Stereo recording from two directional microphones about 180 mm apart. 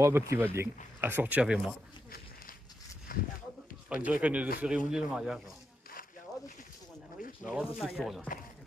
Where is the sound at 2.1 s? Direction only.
50° left (ahead or behind).